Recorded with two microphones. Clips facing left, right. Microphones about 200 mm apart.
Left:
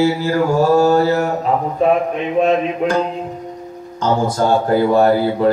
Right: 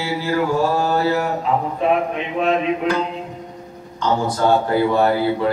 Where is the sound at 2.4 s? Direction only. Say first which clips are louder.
Left 3 dB; 45° left (ahead or behind).